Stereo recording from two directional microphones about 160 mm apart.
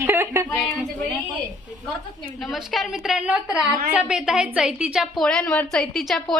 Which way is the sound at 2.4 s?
Centre (ahead or behind).